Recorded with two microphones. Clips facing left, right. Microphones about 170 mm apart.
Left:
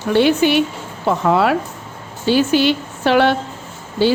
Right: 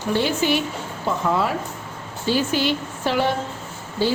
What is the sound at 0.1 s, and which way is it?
A woman's voice, 70° left (ahead or behind).